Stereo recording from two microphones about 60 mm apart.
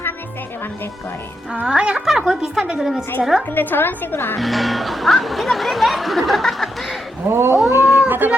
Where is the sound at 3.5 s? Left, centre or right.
Left.